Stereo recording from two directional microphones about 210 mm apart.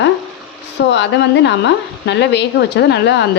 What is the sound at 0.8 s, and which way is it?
Speech, 55° left (ahead or behind).